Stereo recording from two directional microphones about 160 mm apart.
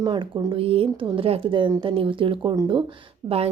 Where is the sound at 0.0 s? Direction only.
30° right (ahead or behind).